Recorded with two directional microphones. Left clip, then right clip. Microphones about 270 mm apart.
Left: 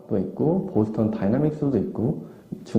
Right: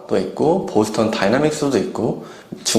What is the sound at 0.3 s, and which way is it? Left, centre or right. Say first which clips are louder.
Speech: right 7 dB; right.